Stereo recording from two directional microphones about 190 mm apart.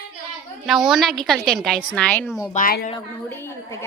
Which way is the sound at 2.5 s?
50° left (ahead or behind).